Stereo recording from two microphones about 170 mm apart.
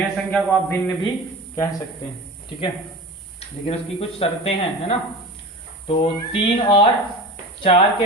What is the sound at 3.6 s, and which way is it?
Speech, 35° left (ahead or behind).